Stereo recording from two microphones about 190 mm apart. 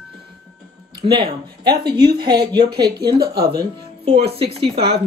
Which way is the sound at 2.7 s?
55° right (ahead or behind).